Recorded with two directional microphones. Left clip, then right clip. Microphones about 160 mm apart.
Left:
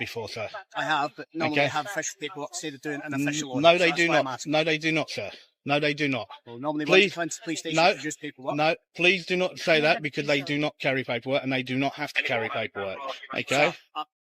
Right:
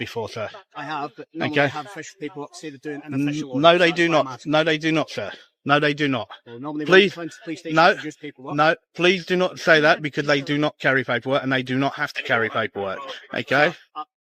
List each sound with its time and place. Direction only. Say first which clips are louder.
0.0 s speech: right 4 dB; 75° right (ahead or behind)
0.8 s speech: left 3 dB; 5° right (ahead or behind)
3.6 s speech: right 4 dB; 70° right (ahead or behind)
6.6 s speech: left 1 dB; centre (ahead or behind)
6.8 s speech: right 5 dB; 70° right (ahead or behind)
7.2 s speech: left 1 dB; centre (ahead or behind)
7.7 s speech: right 6 dB; 60° right (ahead or behind)
8.0 s speech: left 1 dB; centre (ahead or behind)
8.5 s speech: right 7 dB; 60° right (ahead or behind)